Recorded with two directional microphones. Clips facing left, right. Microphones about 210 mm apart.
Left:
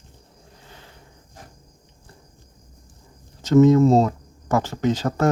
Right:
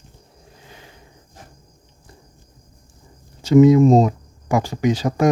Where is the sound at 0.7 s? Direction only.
15° right (ahead or behind).